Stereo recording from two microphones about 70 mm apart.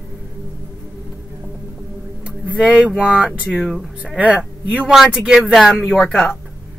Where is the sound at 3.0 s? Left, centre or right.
Centre.